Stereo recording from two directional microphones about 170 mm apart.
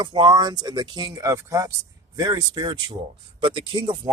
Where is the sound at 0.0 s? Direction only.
25° right (ahead or behind).